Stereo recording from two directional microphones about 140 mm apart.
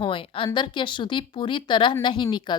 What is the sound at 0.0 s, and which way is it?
A woman's voice, 40° left (ahead or behind).